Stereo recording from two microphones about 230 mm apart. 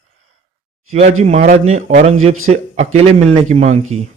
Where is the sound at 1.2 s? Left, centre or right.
Right.